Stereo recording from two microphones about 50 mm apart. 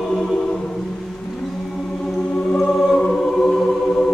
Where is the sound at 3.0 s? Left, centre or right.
Centre.